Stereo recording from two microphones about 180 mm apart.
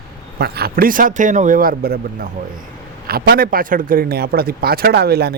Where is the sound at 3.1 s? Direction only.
55° right (ahead or behind).